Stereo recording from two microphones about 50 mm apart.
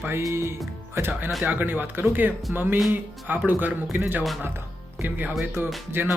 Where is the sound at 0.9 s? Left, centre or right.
Right.